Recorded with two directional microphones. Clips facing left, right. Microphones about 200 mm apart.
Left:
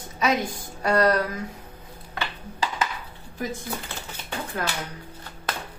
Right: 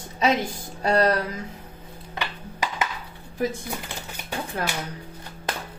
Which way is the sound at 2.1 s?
15° right (ahead or behind).